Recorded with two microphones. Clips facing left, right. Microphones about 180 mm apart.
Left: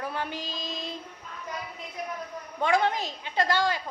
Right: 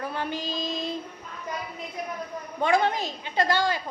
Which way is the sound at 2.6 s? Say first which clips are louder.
Right 2 dB; centre (ahead or behind).